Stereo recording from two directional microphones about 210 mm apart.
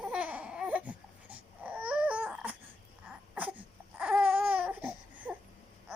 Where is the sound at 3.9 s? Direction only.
5° right (ahead or behind).